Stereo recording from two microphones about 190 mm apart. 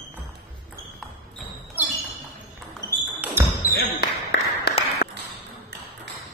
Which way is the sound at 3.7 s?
60° left (ahead or behind).